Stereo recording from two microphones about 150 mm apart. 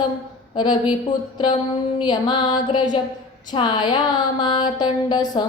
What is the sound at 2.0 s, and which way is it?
Music, 30° left (ahead or behind).